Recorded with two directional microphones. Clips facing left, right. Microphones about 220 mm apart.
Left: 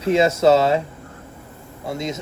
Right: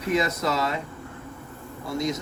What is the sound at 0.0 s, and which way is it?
Speech, 25° left (ahead or behind).